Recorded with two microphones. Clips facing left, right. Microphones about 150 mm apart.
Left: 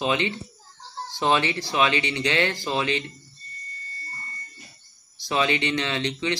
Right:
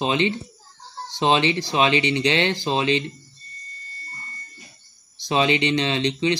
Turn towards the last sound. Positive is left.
turn(degrees=-20)  # may be behind; listen again after turning